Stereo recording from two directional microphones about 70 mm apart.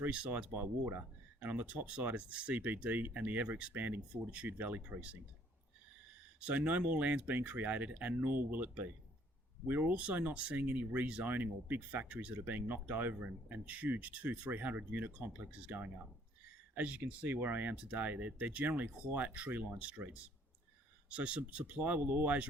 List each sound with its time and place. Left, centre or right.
0.0 s speech: right
6.4 s speech: right
16.7 s speech: right
21.1 s speech: centre